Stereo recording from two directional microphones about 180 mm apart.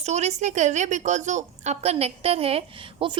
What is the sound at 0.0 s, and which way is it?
A woman's voice, 40° right (ahead or behind).